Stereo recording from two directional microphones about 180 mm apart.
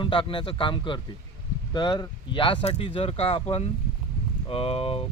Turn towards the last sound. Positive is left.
turn(degrees=30)  # may be behind; listen again after turning